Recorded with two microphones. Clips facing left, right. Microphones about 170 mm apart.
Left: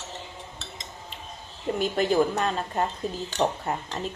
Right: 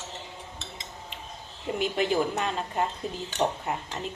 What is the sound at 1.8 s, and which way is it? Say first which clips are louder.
Speech: left 3 dB; 40° left (ahead or behind).